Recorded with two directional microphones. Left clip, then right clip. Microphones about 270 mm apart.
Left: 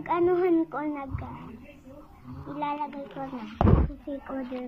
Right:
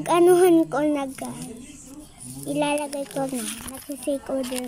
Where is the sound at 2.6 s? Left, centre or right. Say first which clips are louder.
Right 6 dB; right.